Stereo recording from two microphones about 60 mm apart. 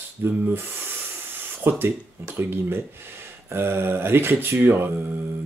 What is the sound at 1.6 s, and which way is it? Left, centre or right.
Speech, right.